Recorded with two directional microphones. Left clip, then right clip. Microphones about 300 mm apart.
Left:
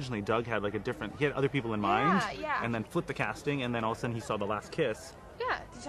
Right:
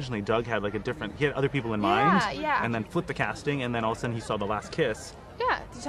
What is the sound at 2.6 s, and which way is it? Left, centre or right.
Speech, centre.